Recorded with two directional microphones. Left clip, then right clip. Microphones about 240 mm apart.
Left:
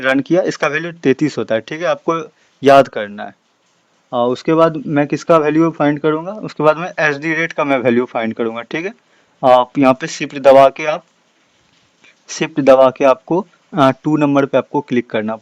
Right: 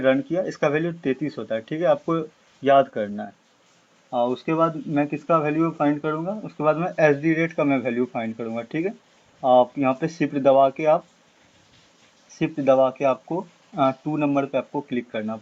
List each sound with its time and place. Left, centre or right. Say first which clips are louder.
0.0 s speech: left 7 dB; left
12.3 s speech: left 9 dB; left